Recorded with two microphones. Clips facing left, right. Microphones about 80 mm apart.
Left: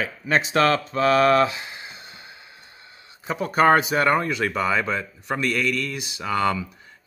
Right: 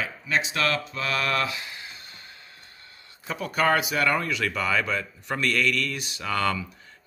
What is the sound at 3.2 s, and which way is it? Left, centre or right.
Speech, left.